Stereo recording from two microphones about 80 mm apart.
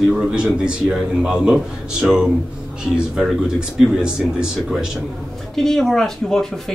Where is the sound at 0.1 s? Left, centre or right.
Centre.